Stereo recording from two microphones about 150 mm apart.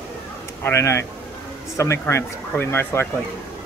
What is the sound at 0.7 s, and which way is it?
Speech, 20° left (ahead or behind).